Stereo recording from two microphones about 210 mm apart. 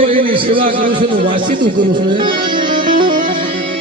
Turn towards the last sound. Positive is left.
turn(degrees=-40)  # may be behind; listen again after turning